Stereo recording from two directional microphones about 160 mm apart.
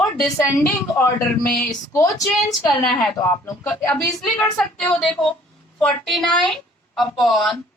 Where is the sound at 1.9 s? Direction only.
20° left (ahead or behind).